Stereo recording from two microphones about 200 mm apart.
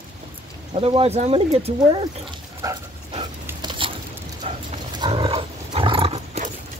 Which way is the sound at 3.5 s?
20° right (ahead or behind).